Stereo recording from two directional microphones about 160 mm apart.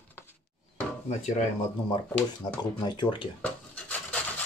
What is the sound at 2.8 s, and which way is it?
Speech, 30° left (ahead or behind).